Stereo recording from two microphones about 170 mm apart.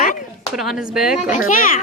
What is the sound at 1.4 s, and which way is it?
Speech, 55° left (ahead or behind).